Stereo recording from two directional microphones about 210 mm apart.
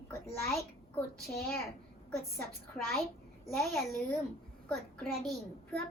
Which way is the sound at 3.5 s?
Centre (ahead or behind).